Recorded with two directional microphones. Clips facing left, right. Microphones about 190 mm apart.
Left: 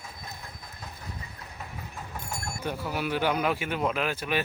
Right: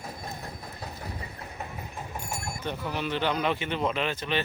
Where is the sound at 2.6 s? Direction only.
10° left (ahead or behind).